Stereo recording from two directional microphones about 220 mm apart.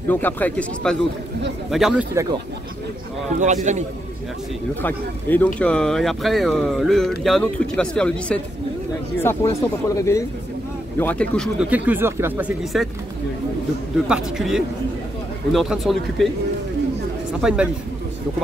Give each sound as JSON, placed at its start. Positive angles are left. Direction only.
{"t": 0.1, "sound": "speech", "side_deg": 10}
{"t": 3.3, "sound": "a man's voice", "side_deg": -35}
{"t": 4.8, "sound": "speech", "side_deg": 5}
{"t": 14.0, "sound": "speech", "side_deg": -5}
{"t": 17.4, "sound": "speech", "side_deg": -5}